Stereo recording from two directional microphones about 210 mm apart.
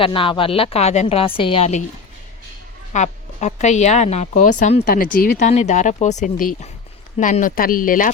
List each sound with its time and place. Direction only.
0.0 s a woman's voice: 25° left (ahead or behind)
2.9 s a woman's voice: 35° left (ahead or behind)